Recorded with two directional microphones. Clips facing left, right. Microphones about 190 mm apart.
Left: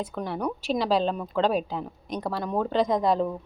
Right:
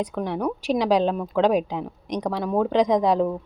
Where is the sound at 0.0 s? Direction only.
10° right (ahead or behind).